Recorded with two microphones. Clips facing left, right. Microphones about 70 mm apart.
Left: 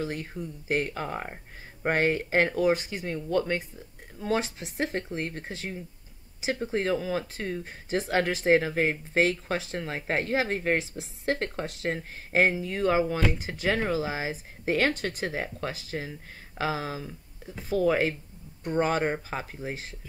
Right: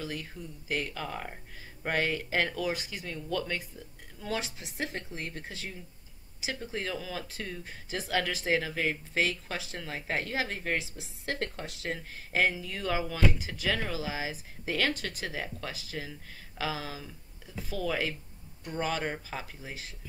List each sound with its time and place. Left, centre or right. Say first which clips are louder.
0.0 s speech: left 6 dB; left